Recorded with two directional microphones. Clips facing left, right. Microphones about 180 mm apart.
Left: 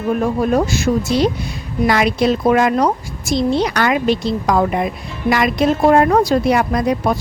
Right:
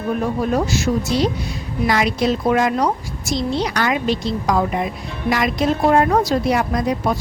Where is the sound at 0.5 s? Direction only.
55° left (ahead or behind).